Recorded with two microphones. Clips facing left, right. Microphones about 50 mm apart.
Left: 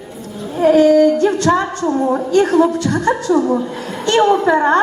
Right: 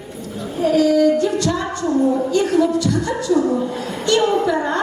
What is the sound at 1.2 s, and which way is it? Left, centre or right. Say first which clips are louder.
A woman's voice: left 5 dB; left.